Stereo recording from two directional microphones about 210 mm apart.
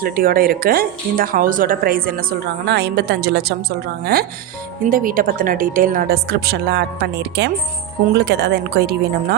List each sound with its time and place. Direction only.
0.0 s speech: 45° right (ahead or behind)